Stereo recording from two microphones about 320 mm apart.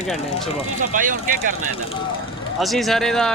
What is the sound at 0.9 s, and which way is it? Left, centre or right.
Speech, right.